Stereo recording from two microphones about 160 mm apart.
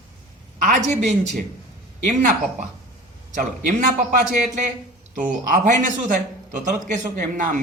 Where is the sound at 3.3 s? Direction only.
50° right (ahead or behind).